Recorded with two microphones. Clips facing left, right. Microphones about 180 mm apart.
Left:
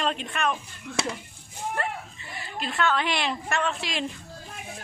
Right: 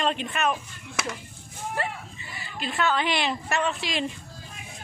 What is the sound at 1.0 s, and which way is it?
Speech, 30° left (ahead or behind).